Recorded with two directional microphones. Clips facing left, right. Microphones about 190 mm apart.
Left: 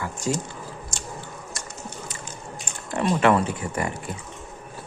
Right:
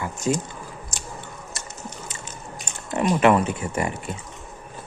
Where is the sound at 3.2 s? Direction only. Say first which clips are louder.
Right 2 dB; 20° right (ahead or behind).